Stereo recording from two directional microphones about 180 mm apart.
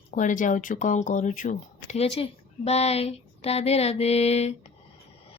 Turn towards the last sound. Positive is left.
turn(degrees=35)  # may be behind; listen again after turning